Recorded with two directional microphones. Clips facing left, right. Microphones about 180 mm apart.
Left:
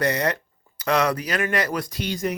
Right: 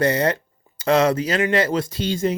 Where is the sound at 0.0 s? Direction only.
30° right (ahead or behind).